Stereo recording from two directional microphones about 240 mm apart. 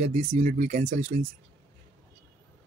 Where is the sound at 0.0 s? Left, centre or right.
Right.